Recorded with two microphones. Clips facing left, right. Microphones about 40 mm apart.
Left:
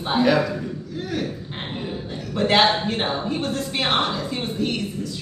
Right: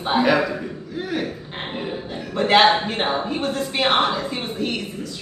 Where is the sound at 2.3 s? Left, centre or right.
Centre.